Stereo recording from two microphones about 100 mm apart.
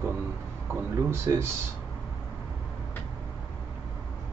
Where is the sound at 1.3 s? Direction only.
30° right (ahead or behind).